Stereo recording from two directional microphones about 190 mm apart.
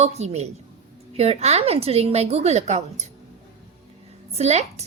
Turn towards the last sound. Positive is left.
turn(degrees=-35)  # may be behind; listen again after turning